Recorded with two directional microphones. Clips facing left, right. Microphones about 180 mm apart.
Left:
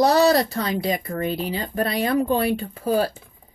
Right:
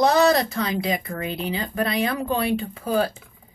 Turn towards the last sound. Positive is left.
turn(degrees=35)  # may be behind; listen again after turning